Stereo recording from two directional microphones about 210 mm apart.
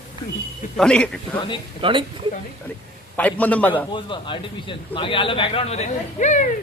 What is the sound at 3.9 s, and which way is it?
A man's voice, 25° left (ahead or behind).